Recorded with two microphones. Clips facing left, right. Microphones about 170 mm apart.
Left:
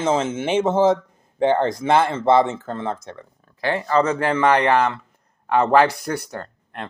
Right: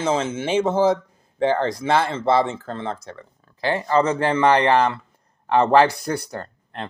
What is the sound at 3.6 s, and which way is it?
Speech, 25° right (ahead or behind).